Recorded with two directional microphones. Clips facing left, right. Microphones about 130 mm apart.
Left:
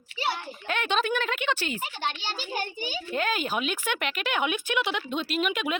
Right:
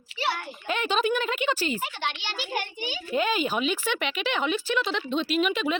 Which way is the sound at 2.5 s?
40° left (ahead or behind).